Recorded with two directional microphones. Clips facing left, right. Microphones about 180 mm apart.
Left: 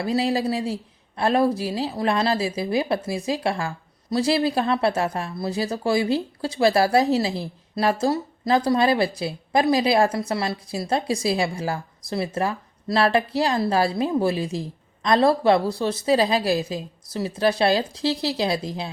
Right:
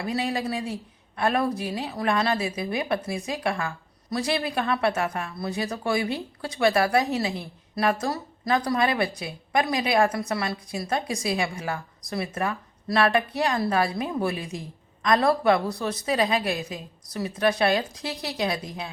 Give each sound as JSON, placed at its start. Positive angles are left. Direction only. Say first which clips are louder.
{"t": 0.0, "sound": "speech", "louder": "left 5 dB", "side_deg": 35}